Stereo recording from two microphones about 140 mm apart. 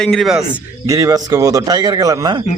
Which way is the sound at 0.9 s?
25° right (ahead or behind).